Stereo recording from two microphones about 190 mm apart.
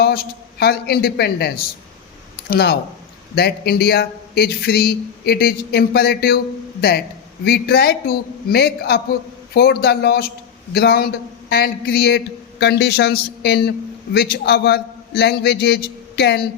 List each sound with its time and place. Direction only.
0.6 s speech: 55° left (ahead or behind)
7.4 s speech: 55° left (ahead or behind)